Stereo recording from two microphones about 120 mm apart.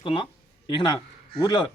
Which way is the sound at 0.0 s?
45° left (ahead or behind).